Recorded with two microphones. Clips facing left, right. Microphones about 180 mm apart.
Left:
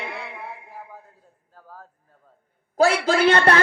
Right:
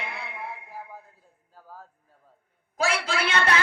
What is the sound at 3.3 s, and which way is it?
Speech, 60° left (ahead or behind).